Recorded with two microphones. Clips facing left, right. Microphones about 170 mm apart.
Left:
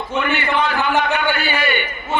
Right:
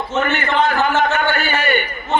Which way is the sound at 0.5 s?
45° right (ahead or behind).